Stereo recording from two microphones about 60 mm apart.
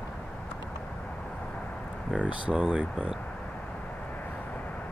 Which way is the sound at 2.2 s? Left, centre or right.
Centre.